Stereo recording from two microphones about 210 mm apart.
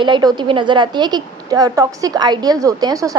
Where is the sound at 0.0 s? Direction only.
20° right (ahead or behind).